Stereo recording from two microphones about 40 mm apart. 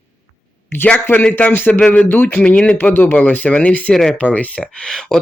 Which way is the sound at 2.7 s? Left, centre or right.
Left.